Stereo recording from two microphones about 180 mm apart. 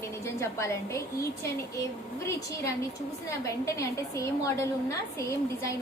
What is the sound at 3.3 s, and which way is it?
A woman's voice, 15° left (ahead or behind).